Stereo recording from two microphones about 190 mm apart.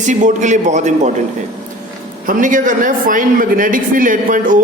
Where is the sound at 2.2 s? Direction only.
45° right (ahead or behind).